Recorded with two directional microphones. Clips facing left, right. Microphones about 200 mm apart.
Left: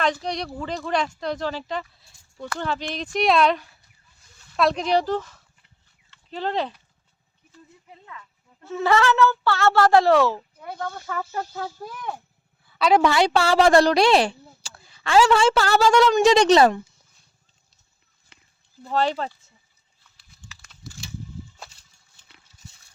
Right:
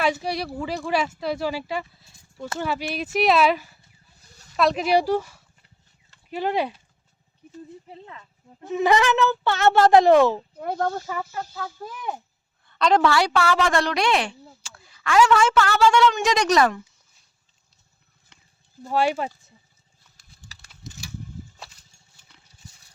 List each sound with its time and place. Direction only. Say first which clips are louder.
0.0 s speech: right 1 dB; 10° right (ahead or behind)
7.5 s speech: right 9 dB; 30° right (ahead or behind)
8.6 s speech: right 1 dB; 15° right (ahead or behind)
10.6 s speech: right 7 dB; 50° right (ahead or behind)
11.0 s speech: even; 10° right (ahead or behind)
11.8 s a woman's voice: right 1 dB; centre (ahead or behind); by 16.8 s 30° left (ahead or behind)
18.8 s speech: right 1 dB; 10° right (ahead or behind)
20.1 s a sound: left 1 dB; 40° right (ahead or behind)